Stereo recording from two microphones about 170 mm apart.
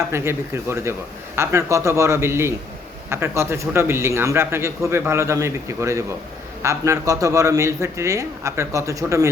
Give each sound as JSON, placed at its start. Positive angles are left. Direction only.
{"t": 0.1, "sound": "a man's voice", "side_deg": -15}